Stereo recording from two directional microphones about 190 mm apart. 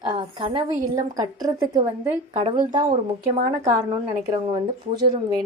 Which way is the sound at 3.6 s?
15° right (ahead or behind).